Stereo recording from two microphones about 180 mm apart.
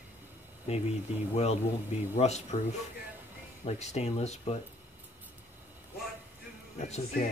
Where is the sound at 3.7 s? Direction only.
40° left (ahead or behind).